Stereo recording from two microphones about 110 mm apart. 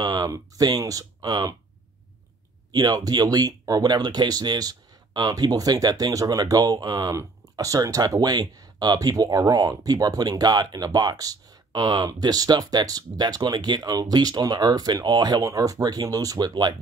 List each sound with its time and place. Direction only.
0.0 s speech: 35° right (ahead or behind)
2.7 s speech: 35° right (ahead or behind)